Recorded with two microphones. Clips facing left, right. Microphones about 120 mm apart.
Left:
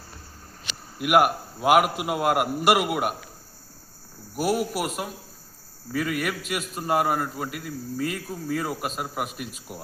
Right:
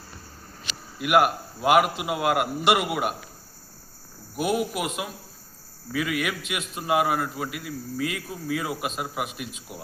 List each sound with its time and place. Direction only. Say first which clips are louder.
1.0 s a man's voice: left 1 dB; 5° left (ahead or behind)
4.4 s a man's voice: left 1 dB; 5° left (ahead or behind)
5.9 s a man's voice: even; 5° right (ahead or behind)